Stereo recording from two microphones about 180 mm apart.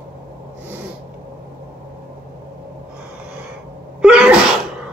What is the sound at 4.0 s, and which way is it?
Sneeze, 5° right (ahead or behind).